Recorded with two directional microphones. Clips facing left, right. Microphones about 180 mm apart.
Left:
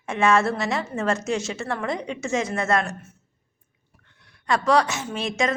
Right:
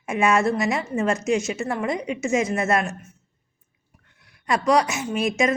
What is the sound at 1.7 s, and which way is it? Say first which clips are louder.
Speech: right 1 dB; 10° right (ahead or behind).